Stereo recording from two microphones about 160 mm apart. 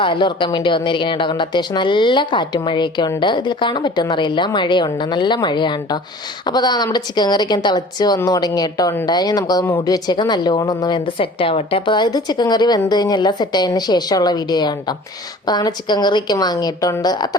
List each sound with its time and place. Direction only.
0.0 s a woman's voice: 30° left (ahead or behind)